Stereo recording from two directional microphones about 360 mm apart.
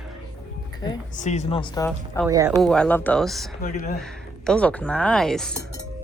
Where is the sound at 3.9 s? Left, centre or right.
Centre.